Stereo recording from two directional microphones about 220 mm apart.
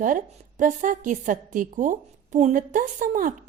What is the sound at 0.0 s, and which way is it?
A woman's voice, 35° right (ahead or behind).